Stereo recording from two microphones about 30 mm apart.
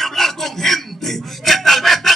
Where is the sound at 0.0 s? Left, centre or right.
Centre.